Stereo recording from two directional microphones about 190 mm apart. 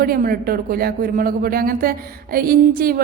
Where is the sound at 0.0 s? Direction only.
50° right (ahead or behind).